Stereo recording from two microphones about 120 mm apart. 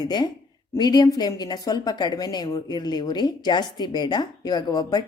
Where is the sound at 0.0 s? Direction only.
35° left (ahead or behind).